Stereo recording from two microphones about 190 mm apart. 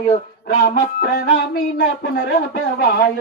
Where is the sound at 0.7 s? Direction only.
50° left (ahead or behind).